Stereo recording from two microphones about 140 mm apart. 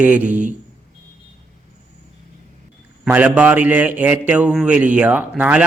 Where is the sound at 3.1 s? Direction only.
10° right (ahead or behind).